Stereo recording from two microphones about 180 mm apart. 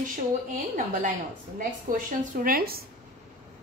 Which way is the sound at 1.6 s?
50° right (ahead or behind).